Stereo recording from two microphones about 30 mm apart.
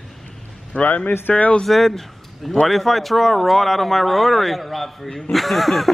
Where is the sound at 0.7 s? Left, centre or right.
Left.